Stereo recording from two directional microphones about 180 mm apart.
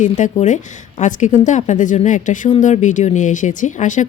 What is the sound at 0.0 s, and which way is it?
Speech, 45° left (ahead or behind).